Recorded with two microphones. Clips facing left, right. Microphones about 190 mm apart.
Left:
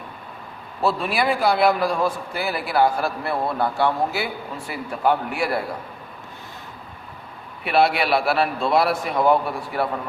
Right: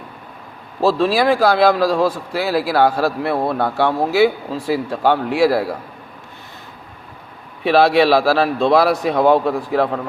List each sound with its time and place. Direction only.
0.9 s a man's voice: 90° right
7.6 s a man's voice: 90° right